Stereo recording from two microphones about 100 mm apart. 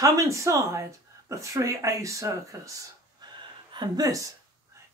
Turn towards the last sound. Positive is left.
turn(degrees=-35)  # may be behind; listen again after turning